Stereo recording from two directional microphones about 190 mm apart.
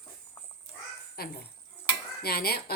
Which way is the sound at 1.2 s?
55° left (ahead or behind).